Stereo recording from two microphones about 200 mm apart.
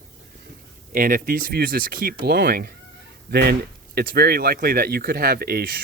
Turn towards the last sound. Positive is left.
turn(degrees=-50)  # may be behind; listen again after turning